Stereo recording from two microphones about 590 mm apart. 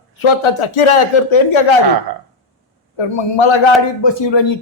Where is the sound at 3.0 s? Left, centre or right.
Left.